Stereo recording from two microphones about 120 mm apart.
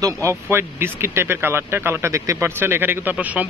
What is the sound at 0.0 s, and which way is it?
Speech, 25° right (ahead or behind).